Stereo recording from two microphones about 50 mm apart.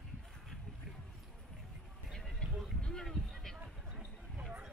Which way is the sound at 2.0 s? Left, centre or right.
Centre.